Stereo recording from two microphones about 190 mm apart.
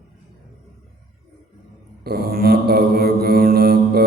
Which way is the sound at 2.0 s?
55° right (ahead or behind).